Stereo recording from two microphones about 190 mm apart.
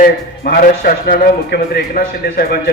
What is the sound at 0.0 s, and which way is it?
A man's voice, 50° left (ahead or behind).